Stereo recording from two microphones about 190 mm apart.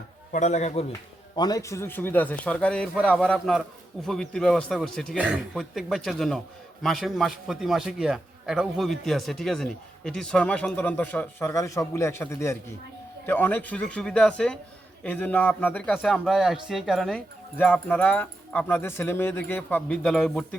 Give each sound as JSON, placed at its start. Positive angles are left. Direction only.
{"t": 0.3, "sound": "a man's voice", "side_deg": 40}
{"t": 1.4, "sound": "a man's voice", "side_deg": 20}